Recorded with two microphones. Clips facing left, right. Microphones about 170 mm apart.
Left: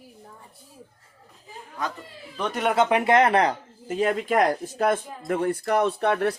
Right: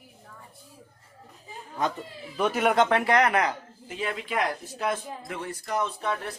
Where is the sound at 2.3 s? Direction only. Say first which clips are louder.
Even; 5° right (ahead or behind).